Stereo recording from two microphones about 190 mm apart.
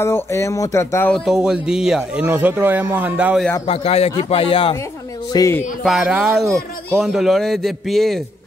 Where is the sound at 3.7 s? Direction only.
30° left (ahead or behind).